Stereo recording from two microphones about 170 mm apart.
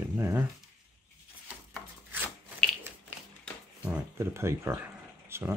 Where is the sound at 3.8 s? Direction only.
10° right (ahead or behind).